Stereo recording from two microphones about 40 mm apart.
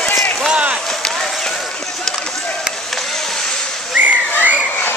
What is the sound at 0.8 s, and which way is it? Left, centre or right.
Run, centre.